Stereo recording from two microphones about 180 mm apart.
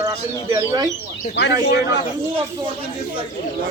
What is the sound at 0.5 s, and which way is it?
Speech, 20° right (ahead or behind).